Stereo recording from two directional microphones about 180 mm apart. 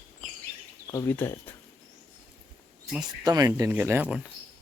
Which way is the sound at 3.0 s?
25° right (ahead or behind).